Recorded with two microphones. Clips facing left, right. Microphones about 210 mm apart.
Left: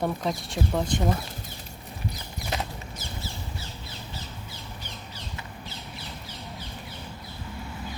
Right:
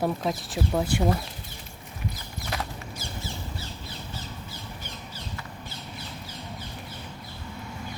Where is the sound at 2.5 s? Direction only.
20° left (ahead or behind).